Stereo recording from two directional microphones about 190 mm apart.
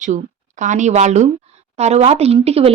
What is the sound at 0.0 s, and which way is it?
Speech, 40° right (ahead or behind).